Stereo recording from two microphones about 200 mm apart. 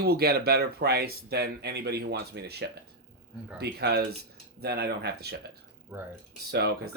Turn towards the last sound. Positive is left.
turn(degrees=-55)  # may be behind; listen again after turning